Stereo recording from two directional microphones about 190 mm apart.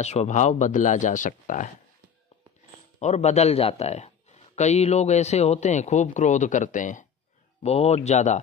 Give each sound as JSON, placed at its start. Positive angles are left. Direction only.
{"t": 0.0, "sound": "speech", "side_deg": 35}
{"t": 3.0, "sound": "speech", "side_deg": 35}